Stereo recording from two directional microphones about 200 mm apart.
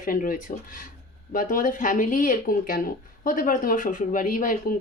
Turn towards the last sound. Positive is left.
turn(degrees=40)  # may be behind; listen again after turning